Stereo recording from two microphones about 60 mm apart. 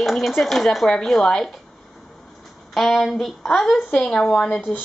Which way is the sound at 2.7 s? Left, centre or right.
Centre.